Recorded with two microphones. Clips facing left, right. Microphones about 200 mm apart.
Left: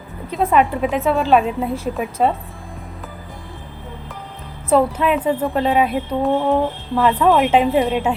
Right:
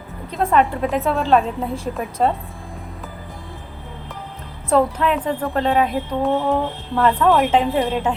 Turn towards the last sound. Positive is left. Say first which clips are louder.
# left 3 dB
turn(degrees=20)  # may be behind; listen again after turning